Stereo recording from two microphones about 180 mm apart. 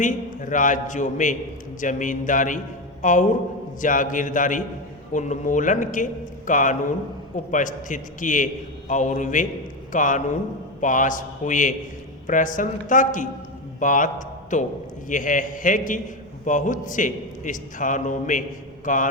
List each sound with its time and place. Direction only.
0.0 s a man's voice: 45° left (ahead or behind)